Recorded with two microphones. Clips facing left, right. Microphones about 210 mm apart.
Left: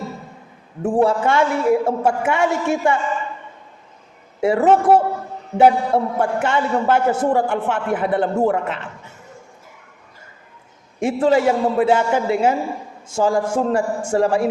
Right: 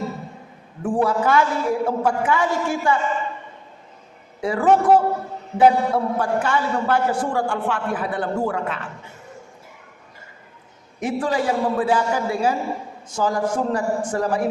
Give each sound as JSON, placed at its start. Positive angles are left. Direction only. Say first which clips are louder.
{"t": 0.8, "sound": "a man's voice", "louder": "left 3 dB", "side_deg": 25}
{"t": 4.4, "sound": "a man's voice", "louder": "left 3 dB", "side_deg": 25}
{"t": 11.0, "sound": "a man's voice", "louder": "left 6 dB", "side_deg": 25}